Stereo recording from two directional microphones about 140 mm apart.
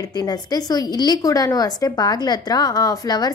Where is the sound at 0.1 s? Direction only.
30° left (ahead or behind).